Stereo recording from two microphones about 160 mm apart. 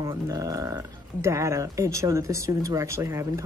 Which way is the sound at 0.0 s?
20° right (ahead or behind).